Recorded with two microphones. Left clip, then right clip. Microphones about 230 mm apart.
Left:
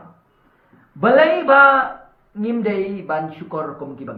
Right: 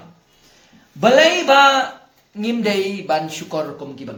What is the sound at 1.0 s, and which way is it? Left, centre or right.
Speech, right.